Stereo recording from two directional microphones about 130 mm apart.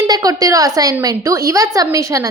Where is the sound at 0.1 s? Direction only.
25° right (ahead or behind).